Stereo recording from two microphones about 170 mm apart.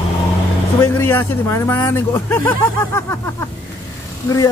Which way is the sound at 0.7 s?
15° left (ahead or behind).